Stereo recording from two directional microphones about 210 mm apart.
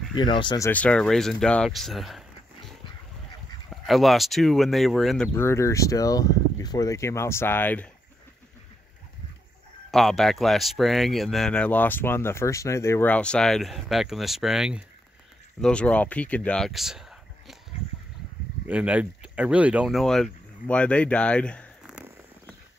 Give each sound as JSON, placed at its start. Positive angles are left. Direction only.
{"t": 0.1, "sound": "speech", "side_deg": 20}
{"t": 0.7, "sound": "speech", "side_deg": 5}
{"t": 3.7, "sound": "speech", "side_deg": 0}
{"t": 9.8, "sound": "speech", "side_deg": 0}
{"t": 18.7, "sound": "speech", "side_deg": -5}